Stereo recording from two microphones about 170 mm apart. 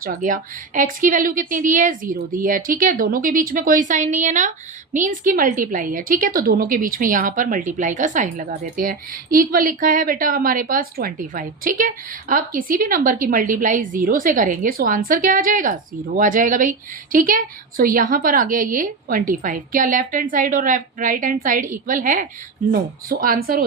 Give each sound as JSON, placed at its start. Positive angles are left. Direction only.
{"t": 0.0, "sound": "a woman's voice", "side_deg": -55}